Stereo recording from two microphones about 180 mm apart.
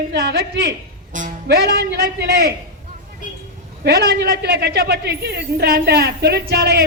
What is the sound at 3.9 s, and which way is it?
A woman's voice, 70° right (ahead or behind).